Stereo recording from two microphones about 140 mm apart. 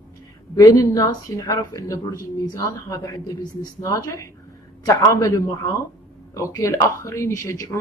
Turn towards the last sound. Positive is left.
turn(degrees=20)  # may be behind; listen again after turning